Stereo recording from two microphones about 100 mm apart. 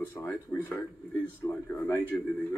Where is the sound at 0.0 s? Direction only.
20° left (ahead or behind).